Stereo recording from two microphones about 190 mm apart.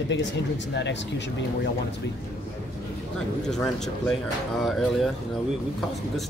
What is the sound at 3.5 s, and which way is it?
Speech, centre (ahead or behind).